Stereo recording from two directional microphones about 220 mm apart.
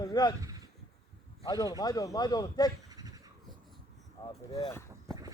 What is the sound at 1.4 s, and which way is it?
Speech, 15° left (ahead or behind).